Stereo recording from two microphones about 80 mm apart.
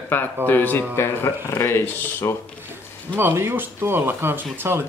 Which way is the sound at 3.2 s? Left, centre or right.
Right.